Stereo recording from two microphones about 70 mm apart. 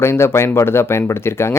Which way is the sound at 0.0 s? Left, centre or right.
Left.